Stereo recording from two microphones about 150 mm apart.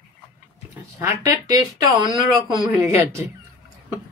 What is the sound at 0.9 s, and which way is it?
Speech, 20° right (ahead or behind).